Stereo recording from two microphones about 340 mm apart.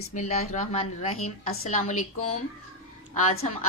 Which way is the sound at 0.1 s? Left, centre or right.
Left.